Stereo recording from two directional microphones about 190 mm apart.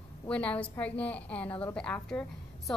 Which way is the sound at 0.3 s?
5° left (ahead or behind).